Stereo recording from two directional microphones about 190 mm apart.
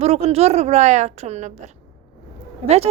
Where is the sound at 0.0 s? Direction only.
35° right (ahead or behind).